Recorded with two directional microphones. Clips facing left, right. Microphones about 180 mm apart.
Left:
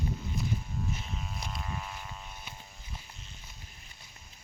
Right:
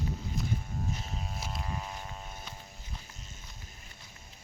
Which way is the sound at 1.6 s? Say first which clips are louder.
Right 1 dB; 30° right (ahead or behind).